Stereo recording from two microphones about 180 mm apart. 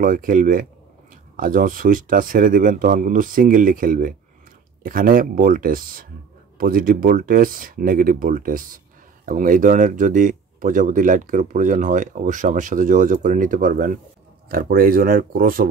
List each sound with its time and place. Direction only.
0.0 s speech: 50° right (ahead or behind)